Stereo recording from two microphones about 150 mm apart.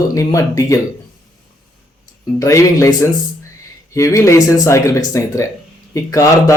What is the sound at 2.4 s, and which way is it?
Speech, 20° left (ahead or behind).